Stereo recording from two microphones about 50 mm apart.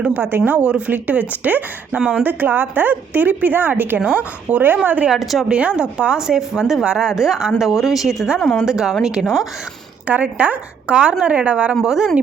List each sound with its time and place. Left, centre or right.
0.1 s speech: right
2.0 s a woman's voice: right
2.2 s speech: right
4.0 s a woman's voice: right
5.0 s a woman's voice: centre
5.5 s a woman's voice: right
10.1 s a woman's voice: right; by 12.1 s centre